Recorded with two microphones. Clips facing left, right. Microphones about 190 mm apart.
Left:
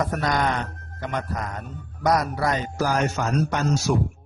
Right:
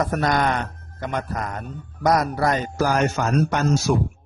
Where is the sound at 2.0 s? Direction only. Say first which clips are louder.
Right 2 dB; 45° right (ahead or behind).